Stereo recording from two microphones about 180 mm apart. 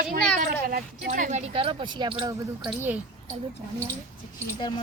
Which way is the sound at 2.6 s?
10° right (ahead or behind).